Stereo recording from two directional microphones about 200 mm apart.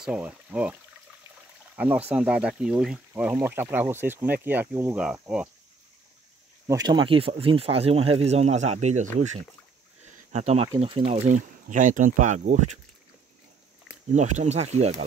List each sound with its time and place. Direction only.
0.0 s speech: 5° right (ahead or behind)
2.0 s speech: 5° right (ahead or behind)
6.7 s speech: 20° right (ahead or behind)
10.0 s a sound: 35° right (ahead or behind)
10.7 s speech: 25° right (ahead or behind)
14.1 s speech: 35° right (ahead or behind)